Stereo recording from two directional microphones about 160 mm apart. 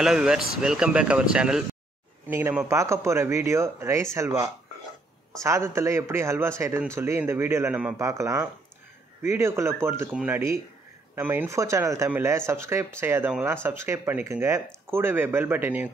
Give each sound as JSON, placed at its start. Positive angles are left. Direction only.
{"t": 0.0, "sound": "speech", "side_deg": -5}
{"t": 5.4, "sound": "speech", "side_deg": -20}